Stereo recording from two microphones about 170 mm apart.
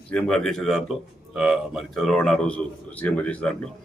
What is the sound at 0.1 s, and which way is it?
A man's voice, 5° left (ahead or behind).